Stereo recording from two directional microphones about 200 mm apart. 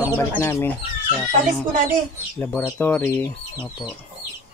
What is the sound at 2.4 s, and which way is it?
Speech, 10° left (ahead or behind).